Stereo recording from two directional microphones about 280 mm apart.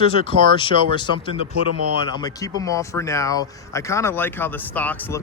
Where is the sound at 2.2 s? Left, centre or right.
Centre.